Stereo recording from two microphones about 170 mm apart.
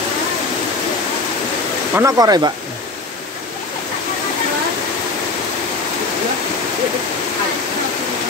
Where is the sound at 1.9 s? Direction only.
20° right (ahead or behind).